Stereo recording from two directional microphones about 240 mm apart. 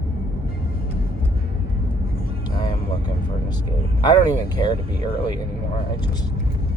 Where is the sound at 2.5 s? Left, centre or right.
Centre.